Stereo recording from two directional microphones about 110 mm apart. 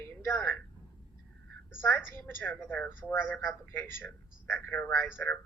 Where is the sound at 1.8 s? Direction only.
20° left (ahead or behind).